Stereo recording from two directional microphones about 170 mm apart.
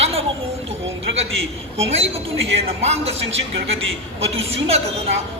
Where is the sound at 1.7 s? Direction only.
35° right (ahead or behind).